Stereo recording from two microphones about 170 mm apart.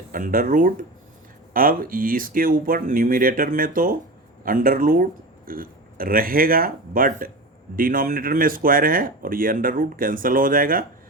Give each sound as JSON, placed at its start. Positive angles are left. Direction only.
{"t": 0.1, "sound": "speech", "side_deg": -55}